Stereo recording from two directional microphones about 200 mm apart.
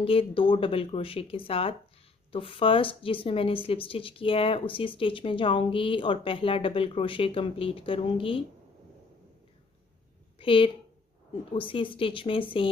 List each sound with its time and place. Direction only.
0.0 s speech: 30° left (ahead or behind)
10.4 s a woman's voice: 25° left (ahead or behind)